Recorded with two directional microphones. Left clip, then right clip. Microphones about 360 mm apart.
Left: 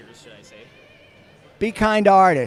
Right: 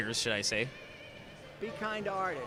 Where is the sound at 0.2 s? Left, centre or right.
Right.